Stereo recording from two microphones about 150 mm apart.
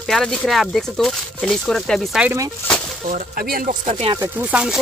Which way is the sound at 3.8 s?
45° right (ahead or behind).